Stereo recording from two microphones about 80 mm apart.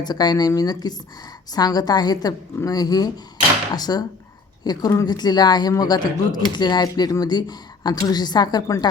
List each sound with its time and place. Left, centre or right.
0.0 s speech: left